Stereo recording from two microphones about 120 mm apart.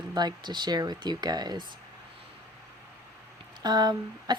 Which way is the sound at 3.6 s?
35° right (ahead or behind).